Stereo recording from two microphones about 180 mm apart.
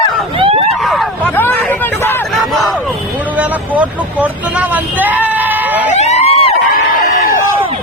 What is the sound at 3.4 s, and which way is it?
Speech, 10° right (ahead or behind).